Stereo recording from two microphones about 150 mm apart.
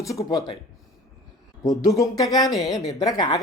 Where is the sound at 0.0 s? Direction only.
20° left (ahead or behind).